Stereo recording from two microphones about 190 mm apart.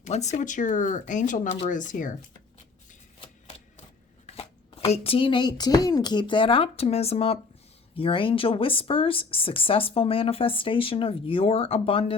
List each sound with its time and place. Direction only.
0.0 s speech: 35° left (ahead or behind)
4.3 s chopping: 30° left (ahead or behind)
4.9 s speech: 30° left (ahead or behind)